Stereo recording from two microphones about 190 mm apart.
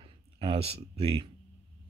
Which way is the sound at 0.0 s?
30° right (ahead or behind).